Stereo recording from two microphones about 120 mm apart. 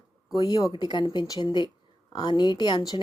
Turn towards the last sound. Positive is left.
turn(degrees=40)  # may be behind; listen again after turning